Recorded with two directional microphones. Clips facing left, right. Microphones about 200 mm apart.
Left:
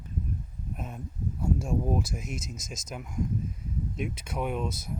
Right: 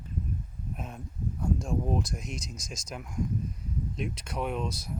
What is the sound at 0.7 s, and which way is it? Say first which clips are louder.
Speech: left 2 dB; centre (ahead or behind).